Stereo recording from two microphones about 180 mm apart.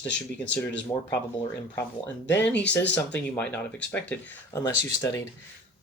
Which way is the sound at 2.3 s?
10° left (ahead or behind).